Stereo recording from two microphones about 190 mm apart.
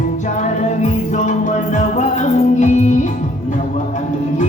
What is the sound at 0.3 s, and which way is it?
Music, 35° left (ahead or behind).